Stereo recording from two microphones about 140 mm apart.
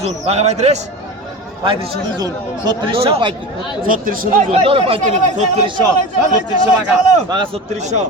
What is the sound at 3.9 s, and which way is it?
Speech, 80° right.